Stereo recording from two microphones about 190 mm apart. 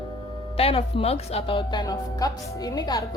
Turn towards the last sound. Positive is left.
turn(degrees=20)  # may be behind; listen again after turning